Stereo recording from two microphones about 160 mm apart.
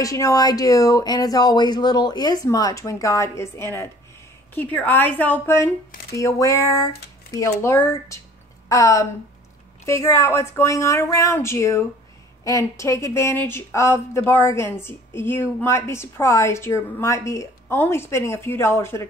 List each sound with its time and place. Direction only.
0.0 s a woman's voice: 20° left (ahead or behind)